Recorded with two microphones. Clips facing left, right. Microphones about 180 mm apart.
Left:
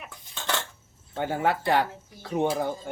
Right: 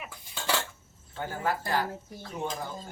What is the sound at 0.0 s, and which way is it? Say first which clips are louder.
Dishes: even; 10° right (ahead or behind).